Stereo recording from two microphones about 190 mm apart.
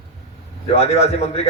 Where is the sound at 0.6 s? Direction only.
35° left (ahead or behind).